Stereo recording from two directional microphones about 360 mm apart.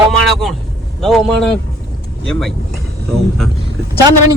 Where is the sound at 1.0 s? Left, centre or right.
Centre.